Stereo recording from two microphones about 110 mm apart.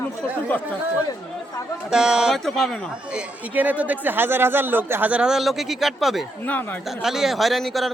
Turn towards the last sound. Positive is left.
turn(degrees=0)  # may be behind; listen again after turning